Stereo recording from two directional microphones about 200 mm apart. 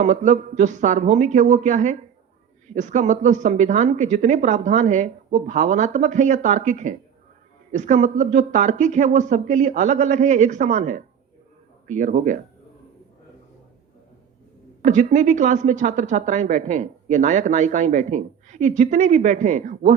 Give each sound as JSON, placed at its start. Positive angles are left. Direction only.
{"t": 0.0, "sound": "a woman's voice", "side_deg": -40}
{"t": 14.8, "sound": "a woman's voice", "side_deg": -40}